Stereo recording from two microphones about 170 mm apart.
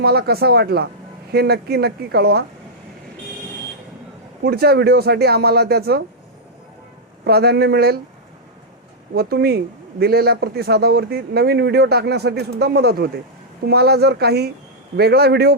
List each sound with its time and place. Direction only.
0.0 s a man's voice: 70° right (ahead or behind)
4.4 s a man's voice: 70° right (ahead or behind)
7.3 s a man's voice: 70° right (ahead or behind)
9.1 s a man's voice: 65° right (ahead or behind)